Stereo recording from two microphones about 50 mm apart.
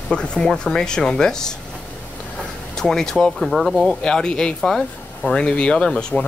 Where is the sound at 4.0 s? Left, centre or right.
Centre.